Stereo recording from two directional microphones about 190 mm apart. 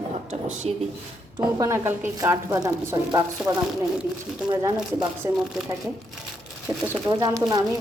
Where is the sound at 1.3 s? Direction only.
15° right (ahead or behind).